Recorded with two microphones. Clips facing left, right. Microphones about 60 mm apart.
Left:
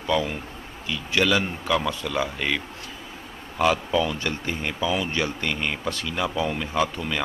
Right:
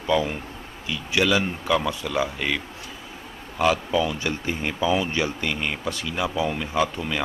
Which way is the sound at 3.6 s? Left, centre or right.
Centre.